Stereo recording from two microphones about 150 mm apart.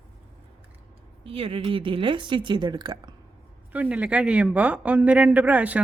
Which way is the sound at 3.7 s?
10° right (ahead or behind).